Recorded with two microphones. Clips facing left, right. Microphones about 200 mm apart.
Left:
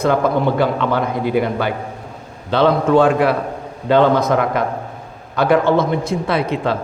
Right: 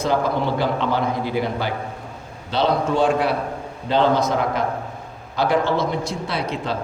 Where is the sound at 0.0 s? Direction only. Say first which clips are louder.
Left 5 dB; 55° left (ahead or behind).